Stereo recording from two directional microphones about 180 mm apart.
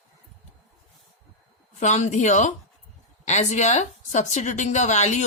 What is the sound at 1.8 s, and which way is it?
A woman's voice, 40° left (ahead or behind).